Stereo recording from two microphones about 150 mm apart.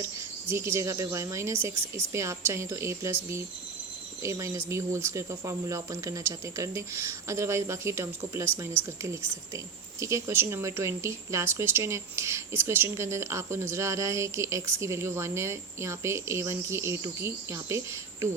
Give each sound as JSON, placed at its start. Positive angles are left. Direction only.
{"t": 0.5, "sound": "speech", "side_deg": -20}